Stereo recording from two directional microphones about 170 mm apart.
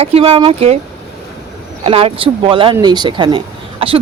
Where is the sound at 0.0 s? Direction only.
35° right (ahead or behind).